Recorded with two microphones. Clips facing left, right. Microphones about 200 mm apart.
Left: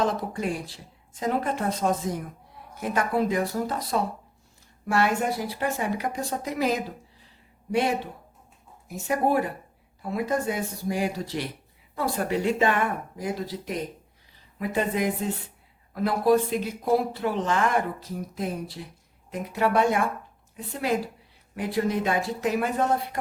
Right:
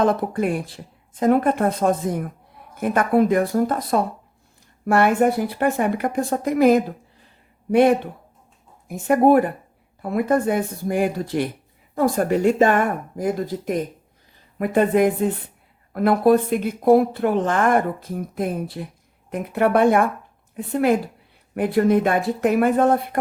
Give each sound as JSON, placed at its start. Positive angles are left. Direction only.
{"t": 0.0, "sound": "a woman's voice", "side_deg": -55}